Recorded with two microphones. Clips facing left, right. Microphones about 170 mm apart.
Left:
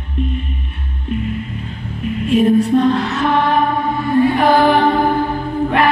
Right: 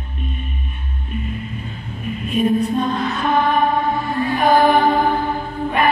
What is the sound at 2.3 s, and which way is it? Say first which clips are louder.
Music: left 5 dB; 75° left (ahead or behind).